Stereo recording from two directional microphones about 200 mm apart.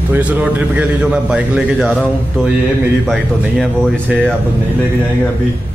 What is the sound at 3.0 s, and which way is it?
Speech, centre (ahead or behind).